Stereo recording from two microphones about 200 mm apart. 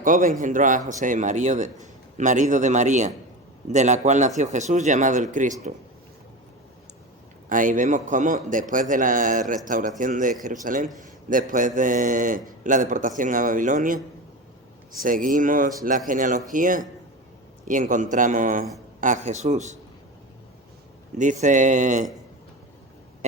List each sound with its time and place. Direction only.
0.0 s a man's voice: 40° right (ahead or behind)
7.5 s a man's voice: 40° right (ahead or behind)
15.0 s a man's voice: 40° right (ahead or behind)
21.2 s a man's voice: 40° right (ahead or behind)